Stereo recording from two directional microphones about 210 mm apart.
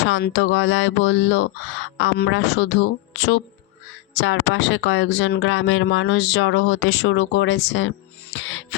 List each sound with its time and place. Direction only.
0.0 s speech: 60° left (ahead or behind)